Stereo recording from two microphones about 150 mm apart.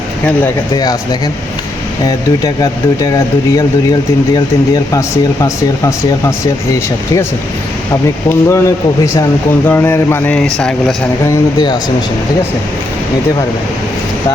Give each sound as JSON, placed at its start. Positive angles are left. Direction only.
{"t": 0.7, "sound": "speech", "side_deg": 25}
{"t": 2.0, "sound": "speech", "side_deg": 25}
{"t": 4.4, "sound": "speech", "side_deg": 25}
{"t": 8.3, "sound": "a man's voice", "side_deg": 15}
{"t": 9.6, "sound": "a man's voice", "side_deg": 15}